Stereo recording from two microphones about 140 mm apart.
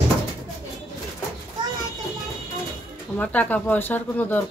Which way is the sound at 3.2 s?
10° left (ahead or behind).